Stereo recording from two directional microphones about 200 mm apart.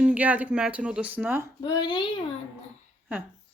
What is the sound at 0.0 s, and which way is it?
Speech, 5° right (ahead or behind).